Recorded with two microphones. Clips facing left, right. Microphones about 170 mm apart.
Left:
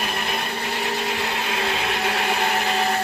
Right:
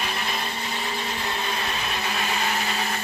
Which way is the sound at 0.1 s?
55° left (ahead or behind).